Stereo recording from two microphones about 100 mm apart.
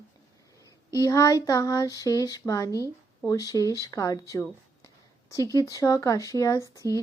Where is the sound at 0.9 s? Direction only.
30° left (ahead or behind).